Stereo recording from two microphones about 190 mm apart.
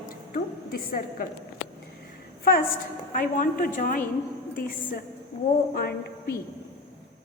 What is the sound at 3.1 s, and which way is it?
Speech, 45° left (ahead or behind).